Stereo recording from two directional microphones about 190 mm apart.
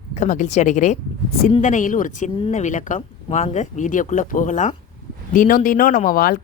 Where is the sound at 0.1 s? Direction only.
40° left (ahead or behind).